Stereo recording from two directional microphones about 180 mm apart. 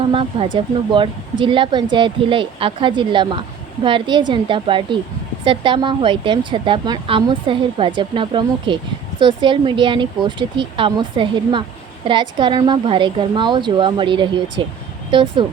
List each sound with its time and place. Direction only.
0.1 s a woman's voice: 30° right (ahead or behind)